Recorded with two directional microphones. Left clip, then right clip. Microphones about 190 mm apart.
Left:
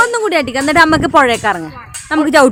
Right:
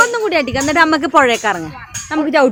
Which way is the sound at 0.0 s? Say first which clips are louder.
Left 1 dB; 10° left (ahead or behind).